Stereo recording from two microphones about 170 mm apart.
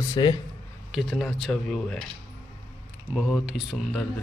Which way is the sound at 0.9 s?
Centre (ahead or behind).